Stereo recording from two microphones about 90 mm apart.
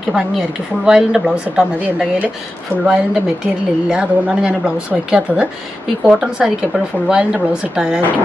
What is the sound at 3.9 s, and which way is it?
A woman's voice, 10° right (ahead or behind).